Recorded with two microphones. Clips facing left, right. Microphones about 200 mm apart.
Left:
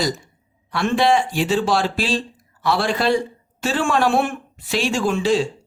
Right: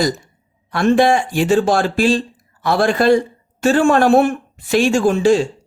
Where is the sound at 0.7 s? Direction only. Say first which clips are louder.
Right 4 dB; 50° right (ahead or behind).